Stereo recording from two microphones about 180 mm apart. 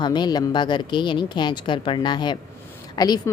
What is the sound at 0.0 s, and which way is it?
Speech, 25° left (ahead or behind).